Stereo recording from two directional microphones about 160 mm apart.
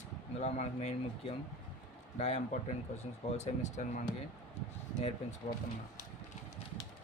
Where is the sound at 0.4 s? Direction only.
45° left (ahead or behind).